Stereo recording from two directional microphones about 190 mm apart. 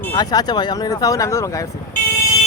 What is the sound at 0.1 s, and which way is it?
Speech, 20° left (ahead or behind).